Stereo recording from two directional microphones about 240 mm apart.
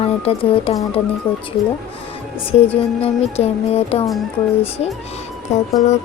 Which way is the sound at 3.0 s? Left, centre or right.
Left.